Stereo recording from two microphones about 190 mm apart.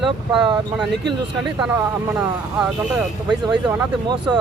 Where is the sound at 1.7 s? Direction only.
10° right (ahead or behind).